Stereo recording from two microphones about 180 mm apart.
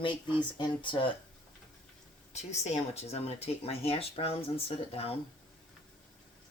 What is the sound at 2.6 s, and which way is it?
Speech, 35° left (ahead or behind).